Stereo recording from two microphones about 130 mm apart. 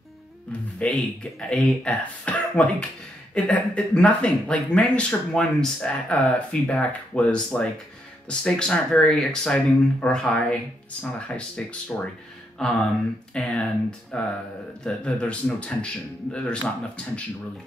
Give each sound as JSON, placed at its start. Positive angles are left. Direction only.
{"t": 0.5, "sound": "speech", "side_deg": 10}